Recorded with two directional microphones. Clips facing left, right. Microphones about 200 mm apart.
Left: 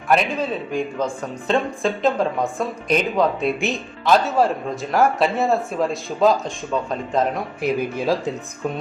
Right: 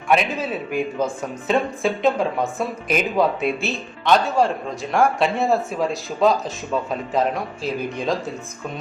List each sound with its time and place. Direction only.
0.1 s speech: 5° right (ahead or behind)